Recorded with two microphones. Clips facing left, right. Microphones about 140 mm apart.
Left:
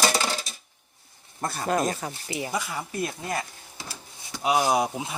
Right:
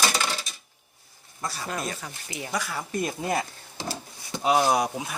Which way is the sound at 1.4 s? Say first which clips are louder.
Left 6 dB; 50° left (ahead or behind).